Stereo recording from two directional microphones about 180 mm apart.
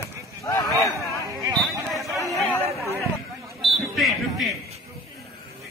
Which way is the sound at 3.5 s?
Centre (ahead or behind).